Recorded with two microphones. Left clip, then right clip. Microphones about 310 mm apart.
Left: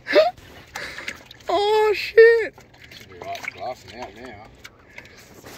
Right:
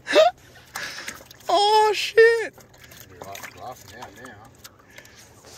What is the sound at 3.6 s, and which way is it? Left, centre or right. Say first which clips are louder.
Boat: left 7 dB; left.